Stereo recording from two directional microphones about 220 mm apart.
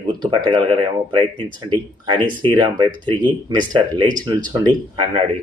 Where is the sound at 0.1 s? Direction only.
20° right (ahead or behind).